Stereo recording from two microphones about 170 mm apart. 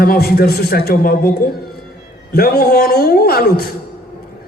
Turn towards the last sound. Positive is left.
turn(degrees=65)  # may be behind; listen again after turning